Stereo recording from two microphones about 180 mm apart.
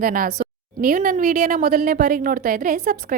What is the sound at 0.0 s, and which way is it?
A woman's voice, 55° right (ahead or behind).